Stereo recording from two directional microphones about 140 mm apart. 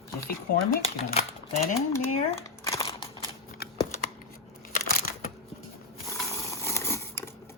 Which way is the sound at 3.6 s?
90° left.